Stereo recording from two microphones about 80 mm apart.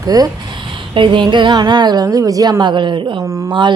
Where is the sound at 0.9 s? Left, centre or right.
Right.